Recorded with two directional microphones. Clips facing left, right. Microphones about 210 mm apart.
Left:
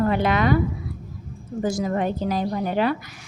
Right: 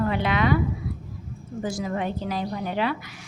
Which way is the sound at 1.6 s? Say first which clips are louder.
Left 4 dB; 40° left (ahead or behind).